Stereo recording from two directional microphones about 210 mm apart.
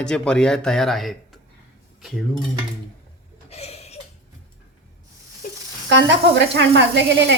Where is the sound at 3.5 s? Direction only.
30° left (ahead or behind).